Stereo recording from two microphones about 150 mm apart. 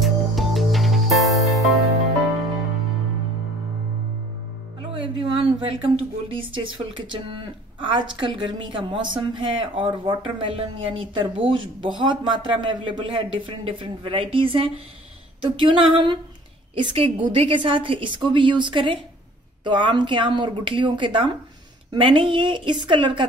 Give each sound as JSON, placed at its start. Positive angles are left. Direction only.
{"t": 0.0, "sound": "music", "side_deg": 0}
{"t": 4.9, "sound": "a sound", "side_deg": -35}
{"t": 6.2, "sound": "a woman's voice", "side_deg": -35}